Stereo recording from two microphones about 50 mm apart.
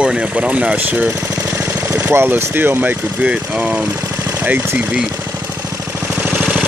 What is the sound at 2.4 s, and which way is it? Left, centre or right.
Speech, right.